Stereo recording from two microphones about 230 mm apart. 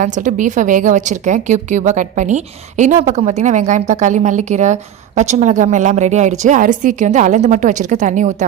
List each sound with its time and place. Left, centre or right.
0.0 s a woman's voice: right